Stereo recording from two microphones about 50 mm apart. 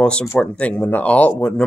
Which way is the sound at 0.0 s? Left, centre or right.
Centre.